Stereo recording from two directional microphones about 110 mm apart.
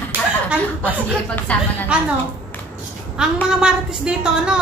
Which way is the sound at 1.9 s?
10° right (ahead or behind).